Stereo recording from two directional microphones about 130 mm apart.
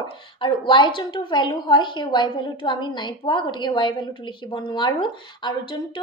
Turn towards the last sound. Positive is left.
turn(degrees=35)  # may be behind; listen again after turning